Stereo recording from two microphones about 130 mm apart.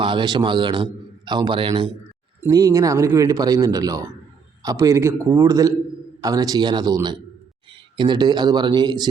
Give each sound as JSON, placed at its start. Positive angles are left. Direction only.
{"t": 0.0, "sound": "a man's voice", "side_deg": -35}
{"t": 2.5, "sound": "a man's voice", "side_deg": -30}